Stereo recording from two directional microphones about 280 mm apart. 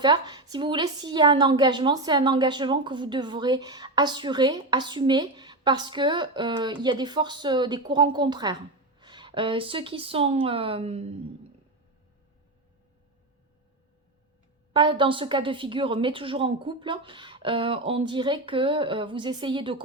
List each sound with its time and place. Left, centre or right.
0.0 s a woman's voice: centre
14.7 s a woman's voice: centre